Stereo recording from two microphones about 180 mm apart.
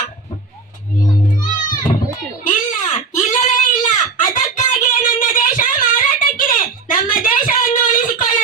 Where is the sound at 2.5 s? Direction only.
45° left (ahead or behind).